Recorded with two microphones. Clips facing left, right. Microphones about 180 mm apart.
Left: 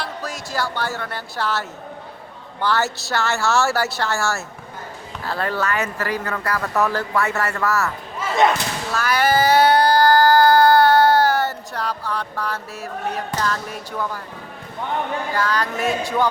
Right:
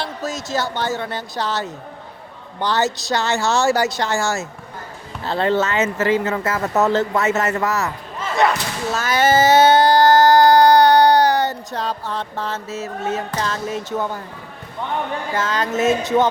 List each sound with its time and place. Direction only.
0.0 s speech: 25° right (ahead or behind)
8.9 s child singing: 20° right (ahead or behind)
15.4 s speech: 20° right (ahead or behind)